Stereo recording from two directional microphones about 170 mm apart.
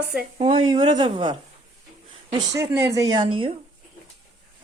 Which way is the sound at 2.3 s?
20° right (ahead or behind).